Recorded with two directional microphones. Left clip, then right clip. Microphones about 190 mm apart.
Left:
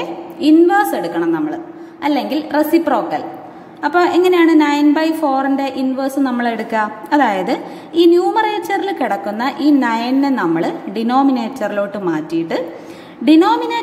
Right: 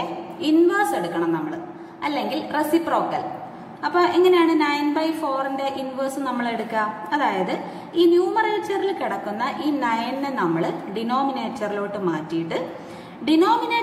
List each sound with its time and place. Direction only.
0.4 s a woman's voice: 35° left (ahead or behind)